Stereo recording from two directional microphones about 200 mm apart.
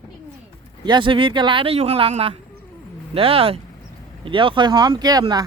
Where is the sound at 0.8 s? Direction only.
25° right (ahead or behind).